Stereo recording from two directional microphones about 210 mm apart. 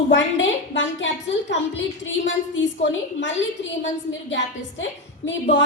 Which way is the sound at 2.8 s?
60° left (ahead or behind).